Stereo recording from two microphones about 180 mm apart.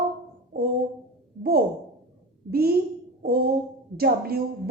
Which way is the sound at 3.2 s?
55° right (ahead or behind).